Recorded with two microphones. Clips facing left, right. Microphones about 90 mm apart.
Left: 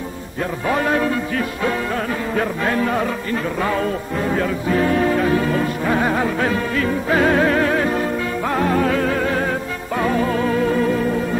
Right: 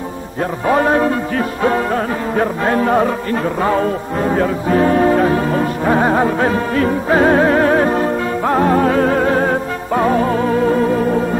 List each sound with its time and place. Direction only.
0.4 s music: 35° right (ahead or behind)
3.6 s speech: 30° right (ahead or behind)